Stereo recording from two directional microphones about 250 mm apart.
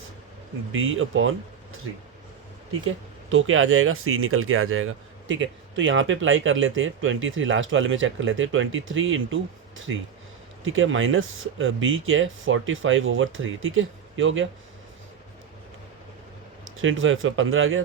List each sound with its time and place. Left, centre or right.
0.7 s speech: right
2.8 s speech: right
16.7 s speech: right